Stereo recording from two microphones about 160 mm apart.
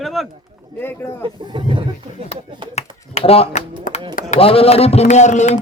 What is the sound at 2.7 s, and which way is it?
Finger snapping, 40° left (ahead or behind).